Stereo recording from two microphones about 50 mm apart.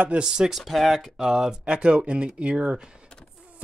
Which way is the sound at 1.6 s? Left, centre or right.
Centre.